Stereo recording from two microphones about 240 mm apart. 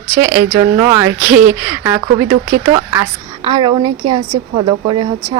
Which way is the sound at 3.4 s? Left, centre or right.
Centre.